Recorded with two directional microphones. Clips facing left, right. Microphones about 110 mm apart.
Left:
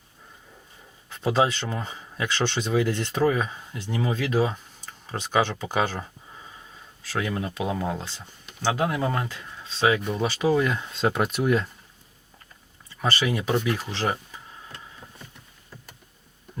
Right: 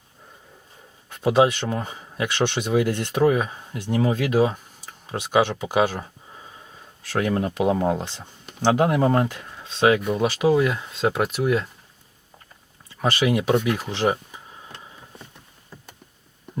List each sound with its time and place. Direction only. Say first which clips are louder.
1.1 s speech: right 5 dB; 15° right (ahead or behind)
7.1 s speech: right 5 dB; 50° right (ahead or behind)
8.0 s speech: right 4 dB; 20° right (ahead or behind)
9.0 s speech: right 7 dB; 40° right (ahead or behind)
9.2 s speech: right 7 dB; 15° right (ahead or behind)
13.1 s speech: right 5 dB; 15° right (ahead or behind)
13.9 s a sound: right 5 dB; 15° right (ahead or behind)